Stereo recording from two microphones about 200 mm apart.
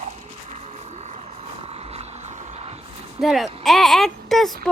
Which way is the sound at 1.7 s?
30° right (ahead or behind).